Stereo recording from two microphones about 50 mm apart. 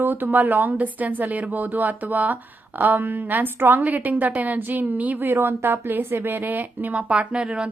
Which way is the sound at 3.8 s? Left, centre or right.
Right.